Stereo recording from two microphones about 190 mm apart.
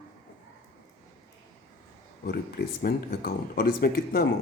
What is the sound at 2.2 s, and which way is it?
A man's voice, 50° left (ahead or behind).